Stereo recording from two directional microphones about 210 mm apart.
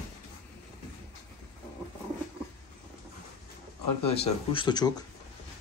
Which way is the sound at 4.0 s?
30° left (ahead or behind).